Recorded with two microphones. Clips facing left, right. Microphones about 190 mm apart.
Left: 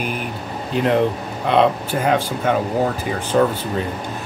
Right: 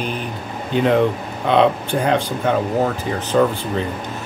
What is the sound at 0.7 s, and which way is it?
Speech, centre (ahead or behind).